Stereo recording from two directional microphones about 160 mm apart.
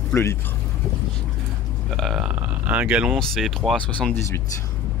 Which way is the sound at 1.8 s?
Centre (ahead or behind).